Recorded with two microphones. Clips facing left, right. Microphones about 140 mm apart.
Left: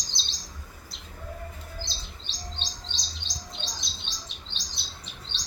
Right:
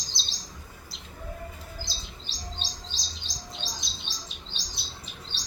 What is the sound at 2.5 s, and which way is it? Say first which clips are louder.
Chirp: even; 5° right (ahead or behind).